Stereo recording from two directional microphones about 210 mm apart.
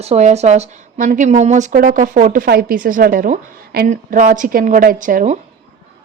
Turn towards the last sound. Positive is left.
turn(degrees=-35)  # may be behind; listen again after turning